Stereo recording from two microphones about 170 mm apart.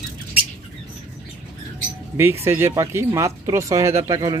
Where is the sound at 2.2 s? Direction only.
15° right (ahead or behind).